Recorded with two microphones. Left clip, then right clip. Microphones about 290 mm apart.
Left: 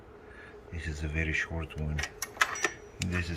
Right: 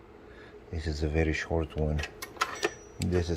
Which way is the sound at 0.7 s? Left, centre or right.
Centre.